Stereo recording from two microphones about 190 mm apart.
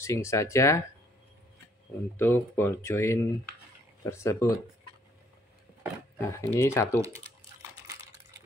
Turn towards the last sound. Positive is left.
turn(degrees=-15)  # may be behind; listen again after turning